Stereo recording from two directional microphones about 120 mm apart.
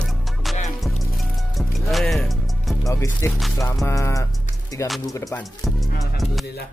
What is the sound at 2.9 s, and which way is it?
Speech, 25° left (ahead or behind).